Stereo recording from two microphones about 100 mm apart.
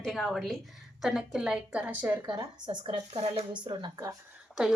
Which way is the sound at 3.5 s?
50° right (ahead or behind).